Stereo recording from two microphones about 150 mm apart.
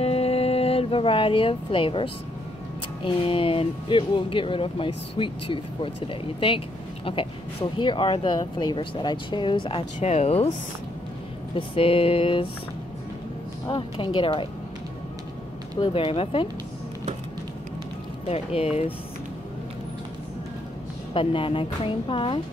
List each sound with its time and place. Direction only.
0.0 s music: 45° left (ahead or behind)
3.0 s speech: 35° left (ahead or behind)
7.1 s speech: 40° left (ahead or behind)
9.9 s speech: 45° left (ahead or behind)
11.5 s speech: 40° left (ahead or behind)
13.7 s speech: 35° left (ahead or behind)
15.8 s speech: 40° left (ahead or behind)
18.3 s speech: 40° left (ahead or behind)
21.1 s speech: 35° left (ahead or behind)